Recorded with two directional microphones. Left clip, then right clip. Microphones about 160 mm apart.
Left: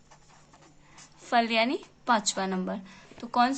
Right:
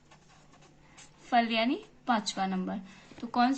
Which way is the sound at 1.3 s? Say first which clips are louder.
Left 3 dB; 40° left (ahead or behind).